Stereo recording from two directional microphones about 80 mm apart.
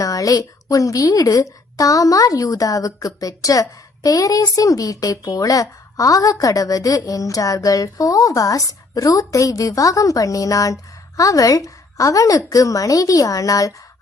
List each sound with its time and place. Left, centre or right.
0.0 s a woman's voice: left